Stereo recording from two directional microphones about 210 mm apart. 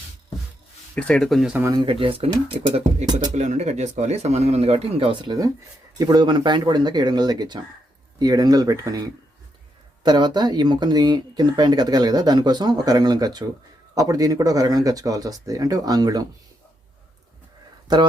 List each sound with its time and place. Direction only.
0.9 s speech: 5° left (ahead or behind); by 16.2 s 15° right (ahead or behind)